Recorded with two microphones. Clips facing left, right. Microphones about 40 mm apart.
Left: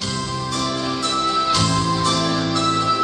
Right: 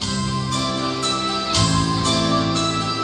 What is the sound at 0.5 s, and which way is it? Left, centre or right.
Music, centre.